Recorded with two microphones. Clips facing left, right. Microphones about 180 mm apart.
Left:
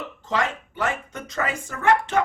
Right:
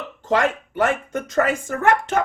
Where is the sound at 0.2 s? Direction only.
50° right (ahead or behind).